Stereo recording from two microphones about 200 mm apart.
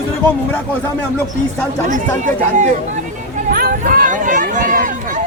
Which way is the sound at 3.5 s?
45° right (ahead or behind).